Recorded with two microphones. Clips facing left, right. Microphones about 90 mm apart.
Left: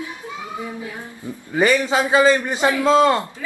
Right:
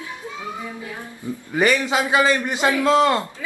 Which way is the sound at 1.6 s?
20° left (ahead or behind).